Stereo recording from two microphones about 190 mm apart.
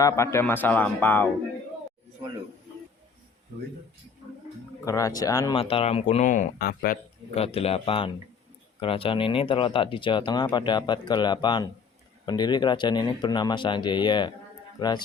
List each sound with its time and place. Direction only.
0.0 s speech: 15° left (ahead or behind)
4.9 s speech: 15° left (ahead or behind)
5.5 s speech: 30° left (ahead or behind); by 7.0 s 50° left (ahead or behind)
7.3 s speech: 30° left (ahead or behind)